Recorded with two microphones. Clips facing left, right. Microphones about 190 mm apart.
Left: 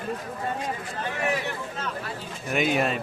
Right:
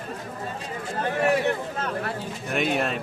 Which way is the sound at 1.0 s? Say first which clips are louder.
Right 7 dB; 55° right (ahead or behind).